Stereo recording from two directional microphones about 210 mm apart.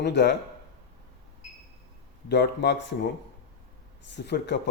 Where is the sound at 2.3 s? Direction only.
55° left (ahead or behind).